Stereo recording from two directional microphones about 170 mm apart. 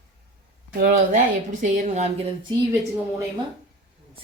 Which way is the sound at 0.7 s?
50° right (ahead or behind).